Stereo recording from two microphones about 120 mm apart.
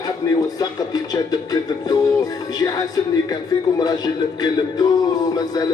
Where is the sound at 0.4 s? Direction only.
35° left (ahead or behind).